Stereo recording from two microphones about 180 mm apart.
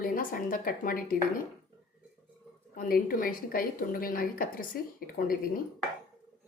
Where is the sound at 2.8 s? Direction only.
55° left (ahead or behind).